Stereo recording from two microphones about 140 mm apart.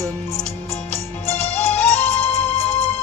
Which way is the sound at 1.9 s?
50° left (ahead or behind).